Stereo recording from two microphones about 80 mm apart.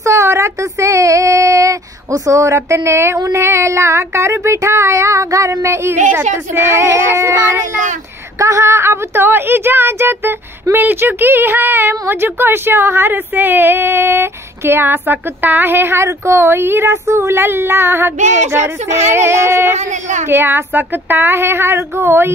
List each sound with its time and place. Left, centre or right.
0.0 s child singing: right
3.2 s a woman's voice: right